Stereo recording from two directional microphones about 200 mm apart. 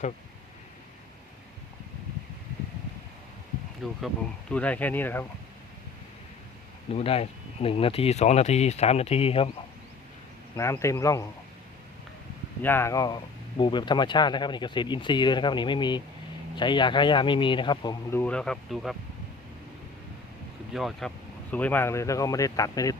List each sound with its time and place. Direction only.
3.8 s speech: centre (ahead or behind)
6.9 s speech: 30° left (ahead or behind)
10.6 s speech: 15° left (ahead or behind)
12.6 s speech: 10° left (ahead or behind)
18.2 s speech: 5° left (ahead or behind)
20.7 s speech: centre (ahead or behind); by 23.0 s 15° left (ahead or behind)